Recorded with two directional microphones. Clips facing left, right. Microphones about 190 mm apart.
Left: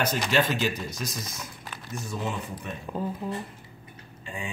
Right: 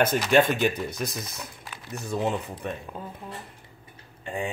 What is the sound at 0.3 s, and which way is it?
Speech, 55° right (ahead or behind).